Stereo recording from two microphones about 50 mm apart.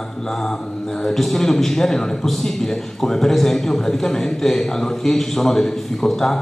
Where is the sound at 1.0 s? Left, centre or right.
Centre.